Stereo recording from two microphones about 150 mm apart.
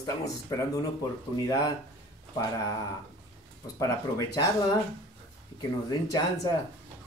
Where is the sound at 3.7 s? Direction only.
20° left (ahead or behind).